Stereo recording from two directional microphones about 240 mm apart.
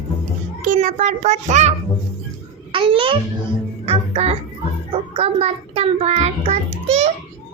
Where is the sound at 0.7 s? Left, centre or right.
Right.